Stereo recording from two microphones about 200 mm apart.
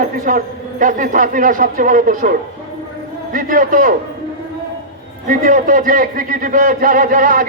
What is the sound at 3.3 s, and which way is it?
Speech, 45° right (ahead or behind).